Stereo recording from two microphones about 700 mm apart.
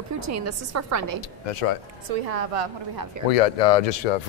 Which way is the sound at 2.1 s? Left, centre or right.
Right.